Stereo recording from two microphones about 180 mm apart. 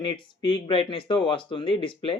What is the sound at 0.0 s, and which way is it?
Speech, 25° left (ahead or behind).